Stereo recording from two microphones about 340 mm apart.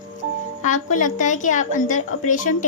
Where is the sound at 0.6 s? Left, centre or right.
Left.